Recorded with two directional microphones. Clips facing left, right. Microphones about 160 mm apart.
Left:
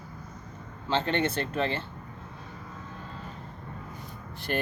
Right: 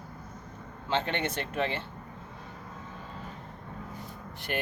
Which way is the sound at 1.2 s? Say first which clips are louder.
Left 3 dB; 10° right (ahead or behind).